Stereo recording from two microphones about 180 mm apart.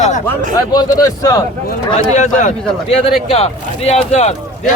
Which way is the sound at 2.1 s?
40° left (ahead or behind).